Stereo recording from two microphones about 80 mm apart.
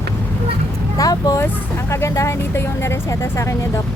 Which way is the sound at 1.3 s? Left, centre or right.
Left.